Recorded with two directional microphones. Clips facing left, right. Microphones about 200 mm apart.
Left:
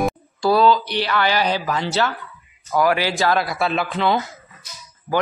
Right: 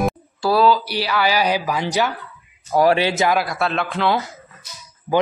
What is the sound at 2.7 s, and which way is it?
Speech, 30° right (ahead or behind).